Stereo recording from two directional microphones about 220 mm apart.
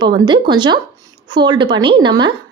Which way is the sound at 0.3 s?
20° right (ahead or behind).